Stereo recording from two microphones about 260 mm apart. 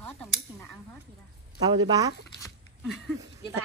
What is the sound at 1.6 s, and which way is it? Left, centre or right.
Speech, centre.